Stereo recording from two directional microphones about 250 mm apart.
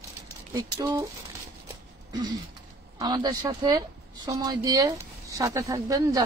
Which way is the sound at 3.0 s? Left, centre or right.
Centre.